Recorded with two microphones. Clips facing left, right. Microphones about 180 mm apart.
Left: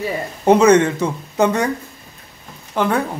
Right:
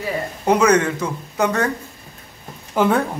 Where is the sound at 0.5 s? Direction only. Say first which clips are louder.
Left 4 dB; 25° left (ahead or behind).